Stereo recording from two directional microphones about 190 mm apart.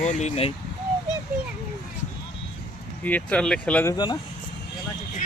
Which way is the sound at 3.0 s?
10° left (ahead or behind).